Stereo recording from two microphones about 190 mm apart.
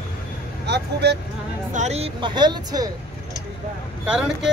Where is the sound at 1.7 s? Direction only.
35° right (ahead or behind).